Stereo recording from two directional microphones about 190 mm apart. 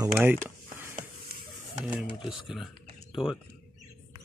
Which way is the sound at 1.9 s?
5° right (ahead or behind).